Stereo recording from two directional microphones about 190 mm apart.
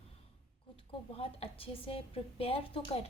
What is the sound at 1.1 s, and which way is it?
A woman's voice, 30° left (ahead or behind).